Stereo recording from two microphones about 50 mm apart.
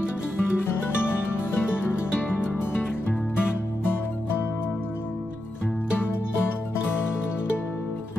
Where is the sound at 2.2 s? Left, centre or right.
Left.